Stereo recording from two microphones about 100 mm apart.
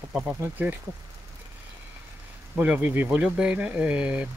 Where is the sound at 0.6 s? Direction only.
20° right (ahead or behind).